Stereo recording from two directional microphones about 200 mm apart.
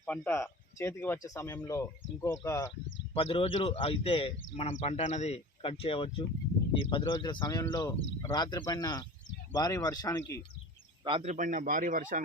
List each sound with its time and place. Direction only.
0.0 s speech: 10° left (ahead or behind)
3.1 s a man's voice: 30° left (ahead or behind)
11.0 s a man's voice: 30° right (ahead or behind)